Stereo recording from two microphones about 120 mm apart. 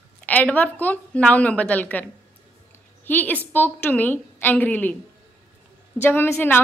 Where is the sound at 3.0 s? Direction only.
15° left (ahead or behind).